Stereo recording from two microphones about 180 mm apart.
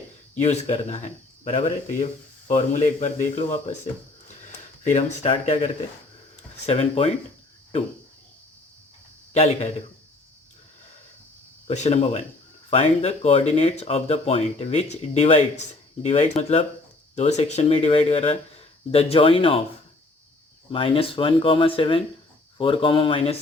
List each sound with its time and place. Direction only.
0.4 s speech: 40° left (ahead or behind)
4.8 s speech: 40° left (ahead or behind)
9.3 s speech: 35° left (ahead or behind)
11.7 s speech: 40° left (ahead or behind)
20.7 s speech: 30° left (ahead or behind)